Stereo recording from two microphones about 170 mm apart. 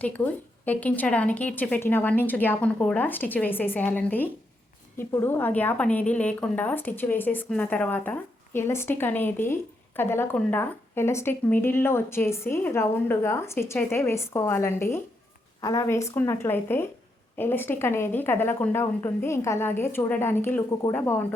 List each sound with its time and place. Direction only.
0.0 s a woman's voice: 10° left (ahead or behind)